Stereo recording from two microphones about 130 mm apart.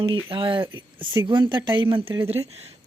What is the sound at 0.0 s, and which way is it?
Speech, 40° right (ahead or behind).